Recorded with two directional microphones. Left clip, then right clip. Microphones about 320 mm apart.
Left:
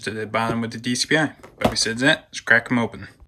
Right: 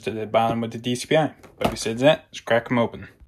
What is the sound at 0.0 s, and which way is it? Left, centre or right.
Speech, centre.